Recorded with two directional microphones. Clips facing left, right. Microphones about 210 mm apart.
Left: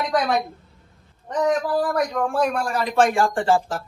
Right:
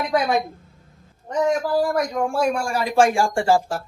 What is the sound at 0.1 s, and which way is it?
Speech, centre (ahead or behind).